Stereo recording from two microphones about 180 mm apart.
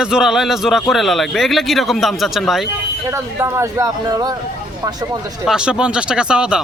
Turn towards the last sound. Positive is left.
turn(degrees=-5)  # may be behind; listen again after turning